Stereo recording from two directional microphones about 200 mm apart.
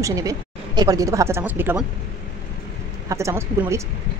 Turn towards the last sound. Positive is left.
turn(degrees=-15)  # may be behind; listen again after turning